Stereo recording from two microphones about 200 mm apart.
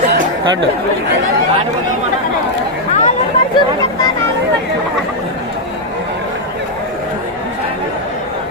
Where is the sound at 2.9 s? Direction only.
35° left (ahead or behind).